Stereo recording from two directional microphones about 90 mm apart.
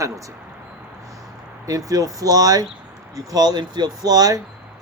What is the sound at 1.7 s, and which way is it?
Speech, 40° right (ahead or behind).